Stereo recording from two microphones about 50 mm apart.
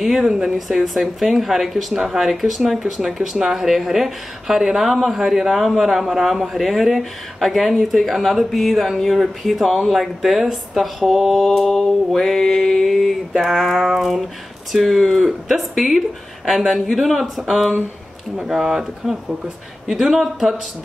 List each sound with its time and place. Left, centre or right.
0.2 s speech: centre
18.4 s speech: centre